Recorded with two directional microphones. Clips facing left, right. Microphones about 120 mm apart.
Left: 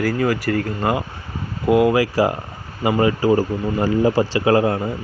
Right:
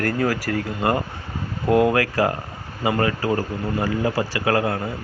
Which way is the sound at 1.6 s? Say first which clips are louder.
Left 2 dB; 15° left (ahead or behind).